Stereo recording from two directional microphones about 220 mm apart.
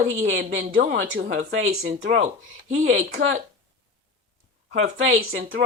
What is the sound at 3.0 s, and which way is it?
Speech, 45° right (ahead or behind).